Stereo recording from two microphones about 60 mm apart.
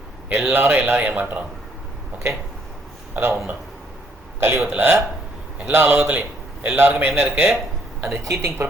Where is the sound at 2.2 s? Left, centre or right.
Right.